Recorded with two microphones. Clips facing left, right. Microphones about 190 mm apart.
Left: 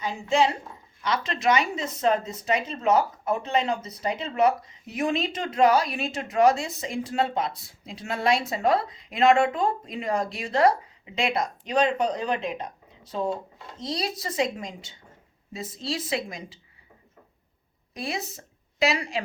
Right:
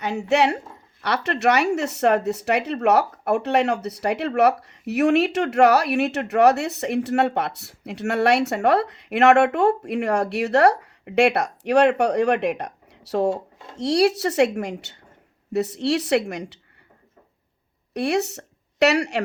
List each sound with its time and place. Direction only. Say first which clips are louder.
0.0 s speech: right 3 dB; 70° right (ahead or behind)
17.9 s a woman's voice: right 10 dB; 70° right (ahead or behind)